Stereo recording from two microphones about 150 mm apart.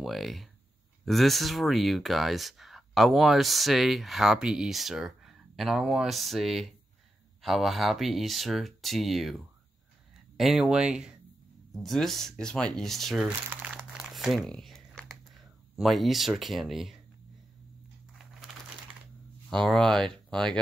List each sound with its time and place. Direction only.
0.0 s speech: centre (ahead or behind)
13.5 s crumpling: 10° right (ahead or behind)
15.8 s speech: centre (ahead or behind)
18.1 s crumpling: centre (ahead or behind)
19.5 s speech: 5° left (ahead or behind)